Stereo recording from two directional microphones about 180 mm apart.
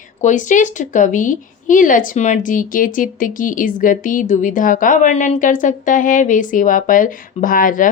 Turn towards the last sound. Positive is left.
turn(degrees=50)  # may be behind; listen again after turning